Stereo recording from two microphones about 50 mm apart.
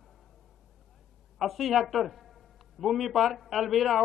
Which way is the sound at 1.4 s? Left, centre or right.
Centre.